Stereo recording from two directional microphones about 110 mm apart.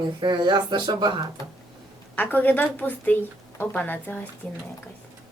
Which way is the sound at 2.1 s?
15° left (ahead or behind).